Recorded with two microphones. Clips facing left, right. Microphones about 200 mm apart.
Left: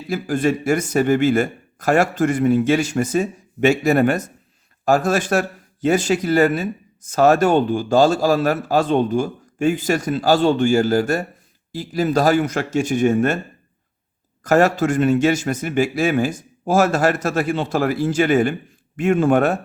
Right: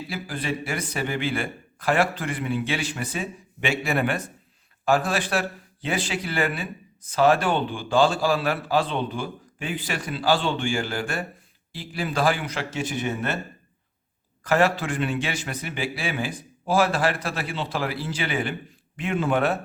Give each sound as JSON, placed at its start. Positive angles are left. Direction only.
{"t": 0.1, "sound": "a man's voice", "side_deg": 45}
{"t": 14.4, "sound": "a man's voice", "side_deg": 45}